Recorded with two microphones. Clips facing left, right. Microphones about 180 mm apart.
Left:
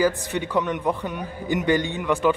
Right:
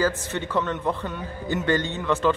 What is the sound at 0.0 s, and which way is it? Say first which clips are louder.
A man's voice: left 3 dB; 15° left (ahead or behind).